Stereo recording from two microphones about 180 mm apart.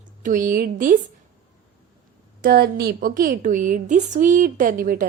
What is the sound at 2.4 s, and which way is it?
A woman's voice, 60° right (ahead or behind).